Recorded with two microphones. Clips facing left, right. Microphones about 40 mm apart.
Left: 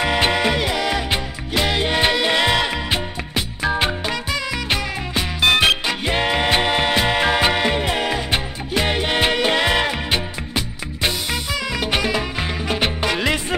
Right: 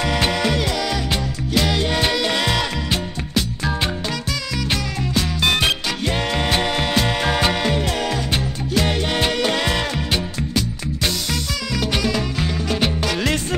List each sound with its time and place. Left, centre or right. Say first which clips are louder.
0.0 s music: left 2 dB; left
11.7 s music: even; left